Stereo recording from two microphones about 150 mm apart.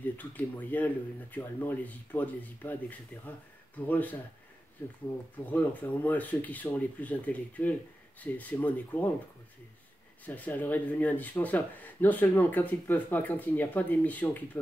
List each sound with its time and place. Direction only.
0.2 s speech: 10° left (ahead or behind)
10.2 s speech: 10° left (ahead or behind)